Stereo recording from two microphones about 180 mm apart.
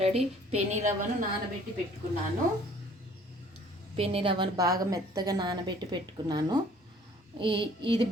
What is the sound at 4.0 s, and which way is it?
A woman's voice, 35° right (ahead or behind).